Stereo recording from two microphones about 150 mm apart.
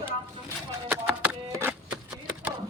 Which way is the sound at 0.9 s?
10° right (ahead or behind).